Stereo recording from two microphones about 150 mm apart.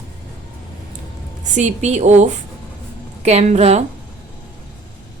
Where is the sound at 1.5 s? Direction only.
50° right (ahead or behind).